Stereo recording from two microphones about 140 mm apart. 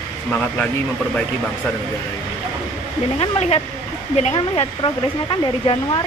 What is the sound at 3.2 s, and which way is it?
Speech, 45° left (ahead or behind).